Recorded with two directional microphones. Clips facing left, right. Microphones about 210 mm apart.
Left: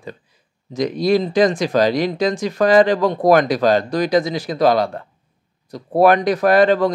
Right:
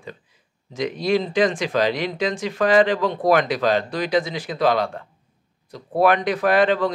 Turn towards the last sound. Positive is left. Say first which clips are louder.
# left 4 dB
turn(degrees=40)  # may be behind; listen again after turning